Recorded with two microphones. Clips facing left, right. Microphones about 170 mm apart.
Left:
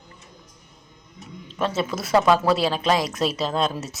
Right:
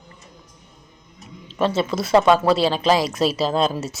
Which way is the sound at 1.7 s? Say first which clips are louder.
Right 3 dB; 30° right (ahead or behind).